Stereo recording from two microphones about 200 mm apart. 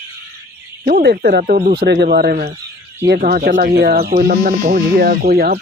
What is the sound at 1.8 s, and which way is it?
Speech, 55° right (ahead or behind).